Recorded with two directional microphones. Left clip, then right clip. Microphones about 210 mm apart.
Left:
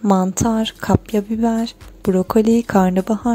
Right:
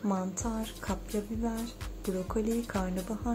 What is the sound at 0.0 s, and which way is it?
Speech, 45° left (ahead or behind).